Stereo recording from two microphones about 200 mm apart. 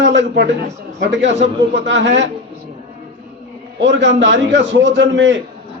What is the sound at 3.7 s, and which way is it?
A man's voice, 60° right (ahead or behind).